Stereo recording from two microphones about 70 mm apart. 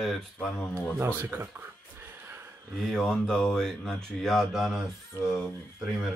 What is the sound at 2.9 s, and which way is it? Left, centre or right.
Speech, centre.